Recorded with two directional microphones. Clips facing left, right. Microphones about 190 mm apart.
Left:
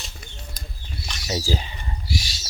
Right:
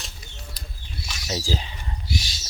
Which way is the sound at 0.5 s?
45° left (ahead or behind).